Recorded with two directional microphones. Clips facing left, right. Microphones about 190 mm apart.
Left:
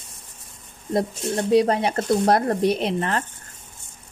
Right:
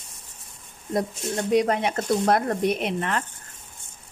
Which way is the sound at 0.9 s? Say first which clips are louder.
Left 3 dB; 30° left (ahead or behind).